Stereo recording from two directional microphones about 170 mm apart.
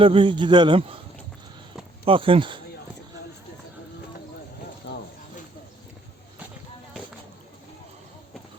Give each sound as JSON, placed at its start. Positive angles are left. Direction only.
{"t": 0.0, "sound": "a man's voice", "side_deg": -30}
{"t": 2.0, "sound": "speech", "side_deg": -30}
{"t": 4.9, "sound": "a sound", "side_deg": 90}